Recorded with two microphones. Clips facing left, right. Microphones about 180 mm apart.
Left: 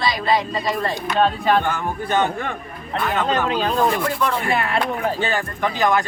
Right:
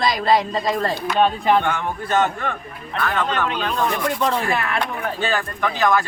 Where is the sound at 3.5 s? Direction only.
35° left (ahead or behind).